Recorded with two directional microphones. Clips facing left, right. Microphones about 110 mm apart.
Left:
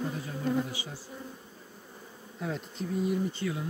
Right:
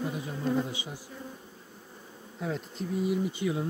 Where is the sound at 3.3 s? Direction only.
20° right (ahead or behind).